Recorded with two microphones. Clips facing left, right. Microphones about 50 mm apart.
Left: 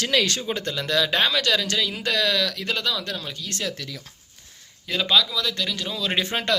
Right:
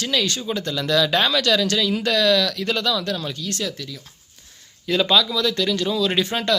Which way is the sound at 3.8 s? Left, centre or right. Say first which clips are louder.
Right 1 dB; left.